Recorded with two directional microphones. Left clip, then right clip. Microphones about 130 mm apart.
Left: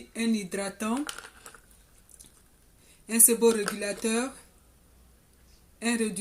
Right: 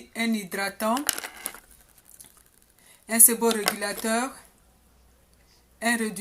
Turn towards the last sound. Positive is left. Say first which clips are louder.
# right 4 dB
turn(degrees=15)  # may be behind; listen again after turning